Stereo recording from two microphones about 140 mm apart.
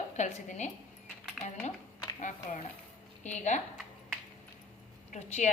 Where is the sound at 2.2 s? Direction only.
60° left (ahead or behind).